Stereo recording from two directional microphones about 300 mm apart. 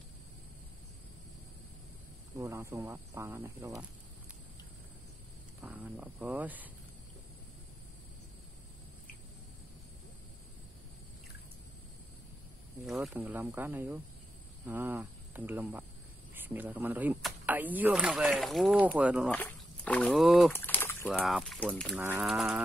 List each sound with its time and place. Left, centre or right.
2.3 s speech: centre
5.6 s speech: centre
12.8 s speech: centre